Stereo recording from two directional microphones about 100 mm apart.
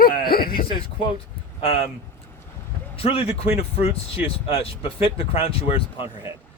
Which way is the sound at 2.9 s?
70° left (ahead or behind).